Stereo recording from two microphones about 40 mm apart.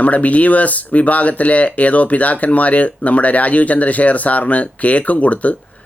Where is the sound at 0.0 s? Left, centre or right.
Left.